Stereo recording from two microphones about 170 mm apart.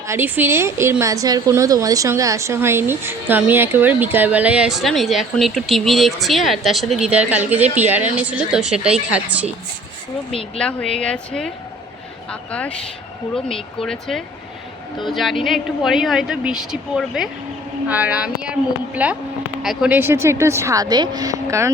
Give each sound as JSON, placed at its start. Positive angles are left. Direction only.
{"t": 0.1, "sound": "a woman's voice", "side_deg": -15}
{"t": 10.6, "sound": "a woman's voice", "side_deg": 5}